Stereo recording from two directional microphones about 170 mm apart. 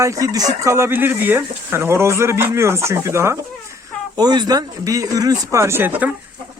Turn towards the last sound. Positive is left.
turn(degrees=-10)  # may be behind; listen again after turning